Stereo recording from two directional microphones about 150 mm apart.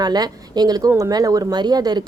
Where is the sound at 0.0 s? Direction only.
25° right (ahead or behind).